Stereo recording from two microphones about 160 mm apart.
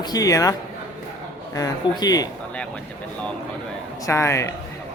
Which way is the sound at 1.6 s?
25° left (ahead or behind).